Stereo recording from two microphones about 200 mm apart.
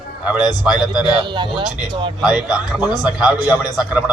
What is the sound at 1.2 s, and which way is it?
Speech, 25° right (ahead or behind).